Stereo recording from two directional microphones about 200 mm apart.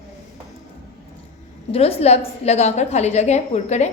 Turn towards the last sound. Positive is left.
turn(degrees=35)  # may be behind; listen again after turning